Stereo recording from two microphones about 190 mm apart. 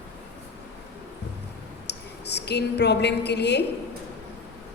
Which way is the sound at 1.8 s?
60° left (ahead or behind).